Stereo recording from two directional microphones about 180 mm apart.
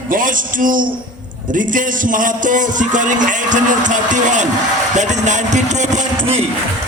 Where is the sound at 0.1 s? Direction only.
50° right (ahead or behind).